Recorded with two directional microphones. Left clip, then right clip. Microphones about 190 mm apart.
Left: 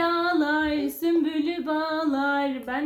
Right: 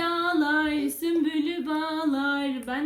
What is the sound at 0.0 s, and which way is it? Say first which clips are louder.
Female singing: left 2 dB; 20° right (ahead or behind).